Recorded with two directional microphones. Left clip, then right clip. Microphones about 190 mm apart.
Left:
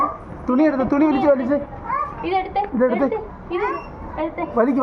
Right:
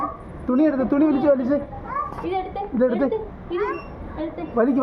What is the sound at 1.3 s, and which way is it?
Speech, 15° left (ahead or behind).